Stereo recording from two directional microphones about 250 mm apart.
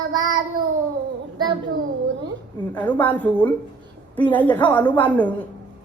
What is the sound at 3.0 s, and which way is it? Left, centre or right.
A woman's voice, centre.